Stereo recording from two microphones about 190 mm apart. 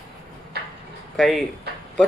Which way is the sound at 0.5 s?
60° right (ahead or behind).